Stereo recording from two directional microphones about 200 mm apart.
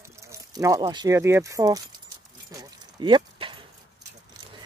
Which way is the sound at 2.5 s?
20° right (ahead or behind).